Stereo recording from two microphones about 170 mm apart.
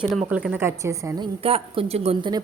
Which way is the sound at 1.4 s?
35° right (ahead or behind).